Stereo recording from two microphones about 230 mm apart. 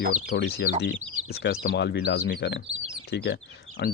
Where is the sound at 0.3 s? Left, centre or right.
Left.